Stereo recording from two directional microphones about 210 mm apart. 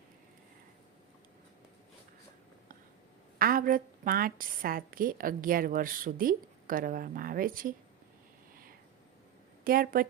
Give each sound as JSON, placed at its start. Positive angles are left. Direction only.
{"t": 3.3, "sound": "a woman's voice", "side_deg": -45}
{"t": 9.6, "sound": "a woman's voice", "side_deg": -45}